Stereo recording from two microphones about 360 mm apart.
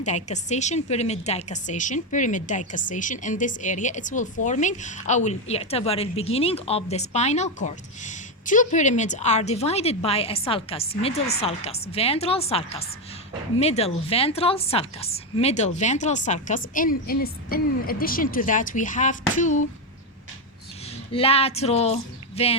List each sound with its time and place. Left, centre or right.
0.0 s a woman's voice: centre
21.1 s speech: centre